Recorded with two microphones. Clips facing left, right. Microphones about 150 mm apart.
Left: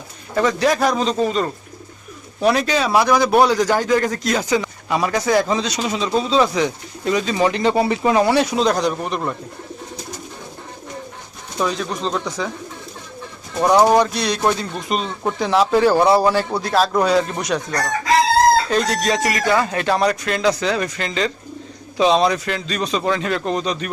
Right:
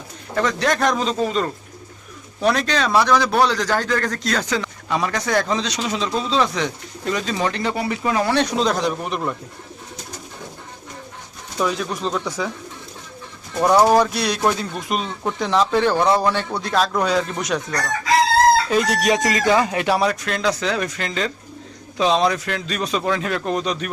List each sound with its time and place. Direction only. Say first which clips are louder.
0.3 s a man's voice: left 3 dB; 5° left (ahead or behind)
7.5 s speech: left 6 dB; 25° left (ahead or behind)
8.4 s speech: left 2 dB; 5° left (ahead or behind)
11.6 s speech: left 1 dB; 5° right (ahead or behind)
13.6 s a man's voice: left 1 dB; centre (ahead or behind)
18.7 s speech: right 1 dB; 10° right (ahead or behind)
20.0 s speech: left 2 dB; centre (ahead or behind)